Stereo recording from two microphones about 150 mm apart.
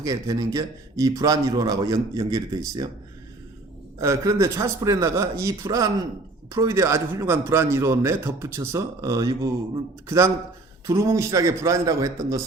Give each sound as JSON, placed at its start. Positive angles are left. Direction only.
{"t": 0.0, "sound": "a man's voice", "side_deg": -25}
{"t": 4.0, "sound": "a man's voice", "side_deg": -20}